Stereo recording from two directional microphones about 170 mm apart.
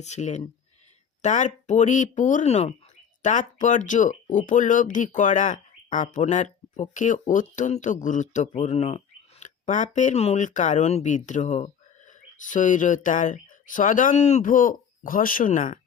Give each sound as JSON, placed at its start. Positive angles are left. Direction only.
{"t": 0.0, "sound": "speech", "side_deg": 40}